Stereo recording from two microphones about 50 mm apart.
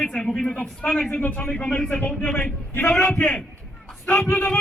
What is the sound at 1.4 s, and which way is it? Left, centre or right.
Speech, centre.